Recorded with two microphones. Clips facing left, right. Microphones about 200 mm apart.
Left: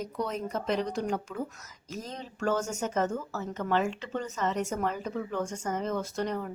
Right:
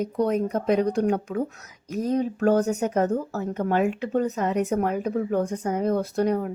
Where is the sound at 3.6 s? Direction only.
55° right (ahead or behind).